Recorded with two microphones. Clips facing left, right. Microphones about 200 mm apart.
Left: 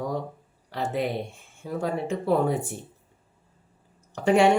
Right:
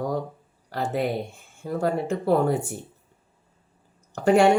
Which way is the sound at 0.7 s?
Centre (ahead or behind).